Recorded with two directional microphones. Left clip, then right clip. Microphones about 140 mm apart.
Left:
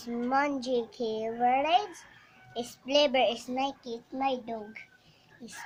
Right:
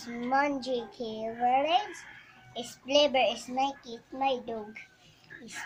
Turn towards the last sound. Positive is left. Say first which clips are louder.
# right 1 dB
turn(degrees=30)  # may be behind; listen again after turning